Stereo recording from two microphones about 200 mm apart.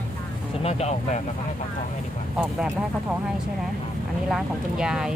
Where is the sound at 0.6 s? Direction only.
35° left (ahead or behind).